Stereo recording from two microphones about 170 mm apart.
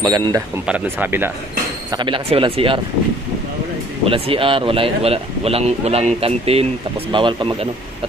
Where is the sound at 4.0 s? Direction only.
30° right (ahead or behind).